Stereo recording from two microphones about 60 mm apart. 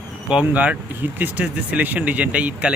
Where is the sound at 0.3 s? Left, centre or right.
Centre.